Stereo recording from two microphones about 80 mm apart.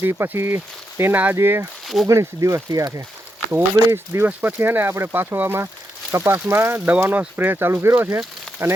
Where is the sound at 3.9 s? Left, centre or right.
Right.